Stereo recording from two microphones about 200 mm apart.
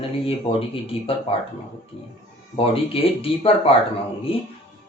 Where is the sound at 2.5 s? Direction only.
30° left (ahead or behind).